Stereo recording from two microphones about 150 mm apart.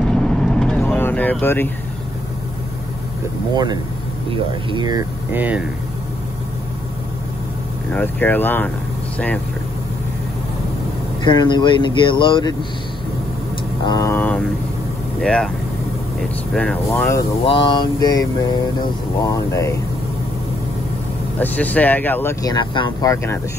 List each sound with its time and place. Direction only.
0.0 s vehicle: 5° left (ahead or behind)
3.5 s speech: 30° right (ahead or behind)
5.3 s speech: 10° right (ahead or behind)
7.9 s speech: 10° left (ahead or behind)
11.2 s speech: 30° left (ahead or behind)
13.8 s speech: 20° left (ahead or behind)
17.5 s a sound: 30° left (ahead or behind)
21.4 s speech: 10° left (ahead or behind)
22.4 s a sound: 30° left (ahead or behind)